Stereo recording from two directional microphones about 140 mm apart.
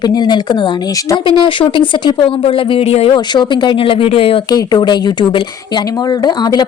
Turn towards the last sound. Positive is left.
turn(degrees=30)  # may be behind; listen again after turning